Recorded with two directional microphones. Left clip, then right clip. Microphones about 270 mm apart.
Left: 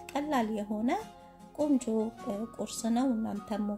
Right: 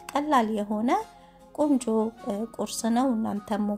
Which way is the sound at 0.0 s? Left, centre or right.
Centre.